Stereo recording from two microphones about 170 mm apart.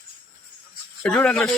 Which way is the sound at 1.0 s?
5° left (ahead or behind).